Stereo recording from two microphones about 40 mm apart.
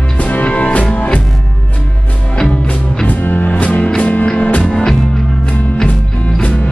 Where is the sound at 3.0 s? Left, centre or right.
Left.